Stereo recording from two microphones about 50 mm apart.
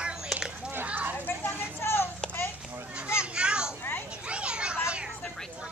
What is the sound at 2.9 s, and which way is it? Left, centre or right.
Children playing, right.